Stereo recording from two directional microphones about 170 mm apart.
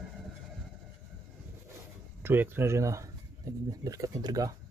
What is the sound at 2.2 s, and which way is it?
Speech, 10° right (ahead or behind).